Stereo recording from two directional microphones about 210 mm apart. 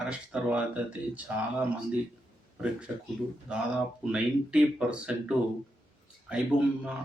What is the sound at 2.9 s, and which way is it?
Speech, 5° right (ahead or behind).